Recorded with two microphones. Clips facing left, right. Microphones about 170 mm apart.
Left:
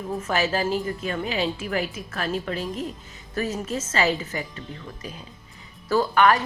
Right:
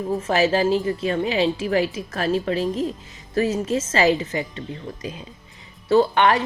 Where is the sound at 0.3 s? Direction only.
35° right (ahead or behind).